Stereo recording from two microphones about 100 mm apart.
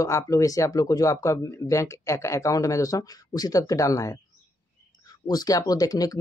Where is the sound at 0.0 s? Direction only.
30° left (ahead or behind).